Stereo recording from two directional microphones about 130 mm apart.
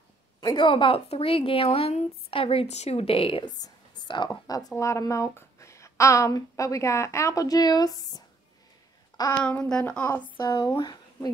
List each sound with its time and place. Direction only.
0.4 s a woman's voice: 35° left (ahead or behind)
9.4 s a woman's voice: 5° left (ahead or behind)
10.2 s speech: 35° left (ahead or behind)